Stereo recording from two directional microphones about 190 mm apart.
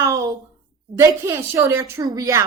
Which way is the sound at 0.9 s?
15° right (ahead or behind).